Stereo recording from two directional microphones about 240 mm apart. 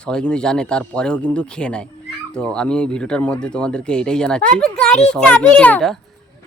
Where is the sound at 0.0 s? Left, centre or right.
Centre.